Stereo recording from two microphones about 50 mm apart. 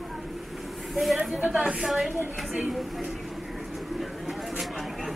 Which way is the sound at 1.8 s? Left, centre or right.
Centre.